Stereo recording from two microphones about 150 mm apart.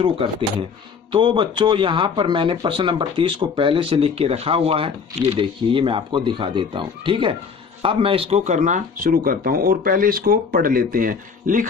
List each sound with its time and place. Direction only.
0.2 s speech: 40° right (ahead or behind); by 11.6 s 65° right (ahead or behind)